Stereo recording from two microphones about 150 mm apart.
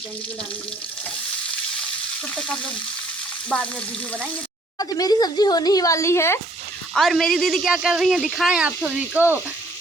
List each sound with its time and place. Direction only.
3.5 s speech: 5° left (ahead or behind)
4.8 s speech: 25° left (ahead or behind)
6.9 s speech: centre (ahead or behind)